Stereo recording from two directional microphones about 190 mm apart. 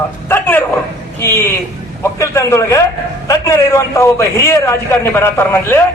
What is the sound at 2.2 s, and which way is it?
A man's voice, 15° left (ahead or behind).